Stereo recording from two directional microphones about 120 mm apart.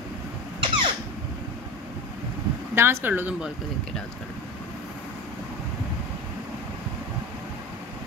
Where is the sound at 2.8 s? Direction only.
20° right (ahead or behind).